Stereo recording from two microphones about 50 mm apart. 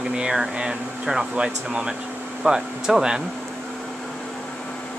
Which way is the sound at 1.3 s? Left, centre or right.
Centre.